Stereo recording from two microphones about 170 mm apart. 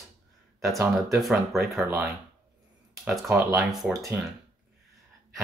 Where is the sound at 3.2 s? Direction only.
20° right (ahead or behind).